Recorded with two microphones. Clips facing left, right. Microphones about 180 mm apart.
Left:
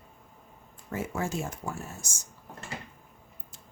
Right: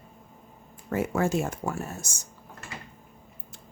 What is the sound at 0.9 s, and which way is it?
Speech, 65° right (ahead or behind).